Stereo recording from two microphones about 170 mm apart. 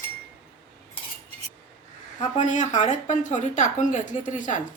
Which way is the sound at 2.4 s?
45° left (ahead or behind).